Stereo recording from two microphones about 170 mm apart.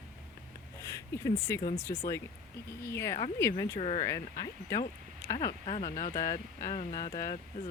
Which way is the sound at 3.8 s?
35° left (ahead or behind).